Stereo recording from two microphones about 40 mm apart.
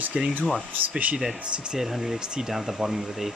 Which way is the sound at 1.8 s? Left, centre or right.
Centre.